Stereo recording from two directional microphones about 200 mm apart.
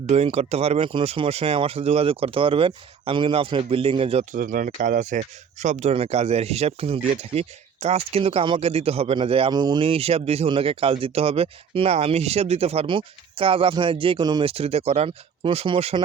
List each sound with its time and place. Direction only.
0.1 s speech: 30° right (ahead or behind)